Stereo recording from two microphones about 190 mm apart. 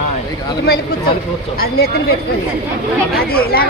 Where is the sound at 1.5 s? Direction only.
50° left (ahead or behind).